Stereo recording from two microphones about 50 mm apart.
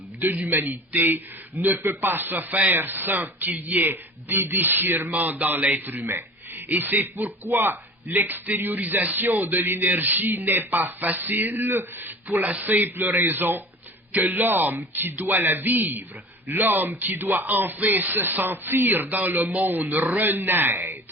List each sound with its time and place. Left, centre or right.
0.2 s speech: right